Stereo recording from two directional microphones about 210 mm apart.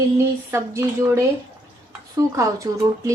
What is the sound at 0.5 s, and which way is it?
Speech, 15° right (ahead or behind).